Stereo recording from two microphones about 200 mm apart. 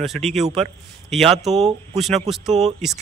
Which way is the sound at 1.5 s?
30° right (ahead or behind).